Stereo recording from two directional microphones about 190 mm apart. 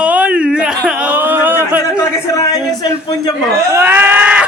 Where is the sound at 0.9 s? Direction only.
5° right (ahead or behind).